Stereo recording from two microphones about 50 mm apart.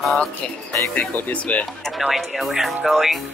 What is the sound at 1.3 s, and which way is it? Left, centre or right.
Speech, left.